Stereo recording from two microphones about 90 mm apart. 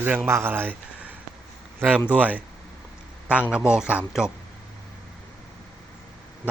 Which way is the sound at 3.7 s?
10° right (ahead or behind).